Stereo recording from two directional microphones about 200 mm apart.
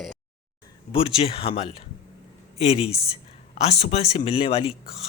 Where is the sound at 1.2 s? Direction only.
30° left (ahead or behind).